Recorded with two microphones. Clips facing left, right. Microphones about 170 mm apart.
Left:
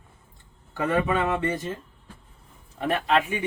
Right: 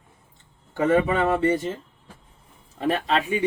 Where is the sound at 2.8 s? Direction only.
30° right (ahead or behind).